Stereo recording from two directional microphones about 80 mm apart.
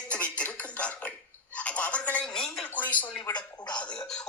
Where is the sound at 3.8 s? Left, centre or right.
Centre.